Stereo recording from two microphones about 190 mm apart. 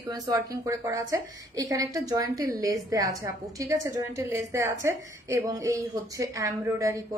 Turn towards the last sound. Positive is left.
turn(degrees=-15)  # may be behind; listen again after turning